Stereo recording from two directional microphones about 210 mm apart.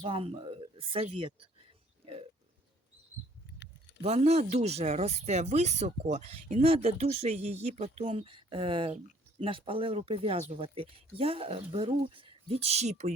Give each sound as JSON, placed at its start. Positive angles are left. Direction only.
{"t": 0.0, "sound": "speech", "side_deg": -25}
{"t": 3.6, "sound": "keys jangling", "side_deg": 55}
{"t": 4.0, "sound": "speech", "side_deg": -30}